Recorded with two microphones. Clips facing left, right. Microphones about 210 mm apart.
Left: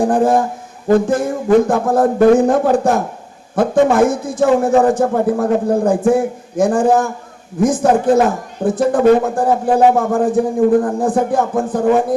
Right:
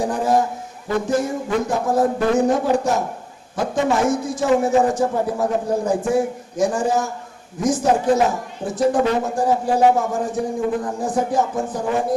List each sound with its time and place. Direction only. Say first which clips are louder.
0.0 s speech: left 5 dB; 50° left (ahead or behind)